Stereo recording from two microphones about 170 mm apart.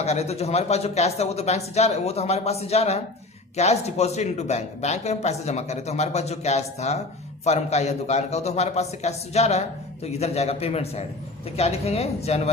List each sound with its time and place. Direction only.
0.0 s a man's voice: 40° left (ahead or behind)